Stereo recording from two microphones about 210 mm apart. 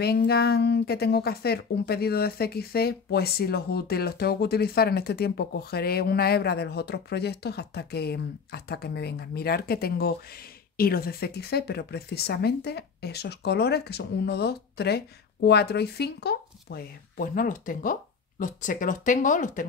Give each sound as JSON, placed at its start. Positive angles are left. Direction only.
{"t": 0.0, "sound": "speech", "side_deg": 50}